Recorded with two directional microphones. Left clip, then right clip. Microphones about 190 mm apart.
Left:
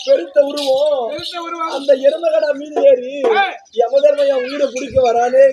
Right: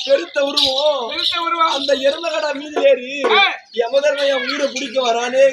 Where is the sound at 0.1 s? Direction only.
25° right (ahead or behind).